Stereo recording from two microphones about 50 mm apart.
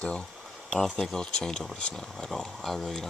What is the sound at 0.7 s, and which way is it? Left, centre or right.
Speech, centre.